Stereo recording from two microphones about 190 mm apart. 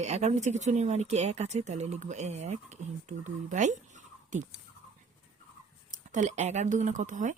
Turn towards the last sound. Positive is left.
turn(degrees=-40)  # may be behind; listen again after turning